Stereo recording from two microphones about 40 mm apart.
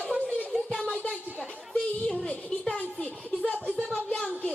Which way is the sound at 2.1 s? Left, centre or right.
Left.